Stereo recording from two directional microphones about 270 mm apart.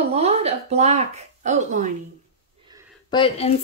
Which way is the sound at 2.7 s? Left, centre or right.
Centre.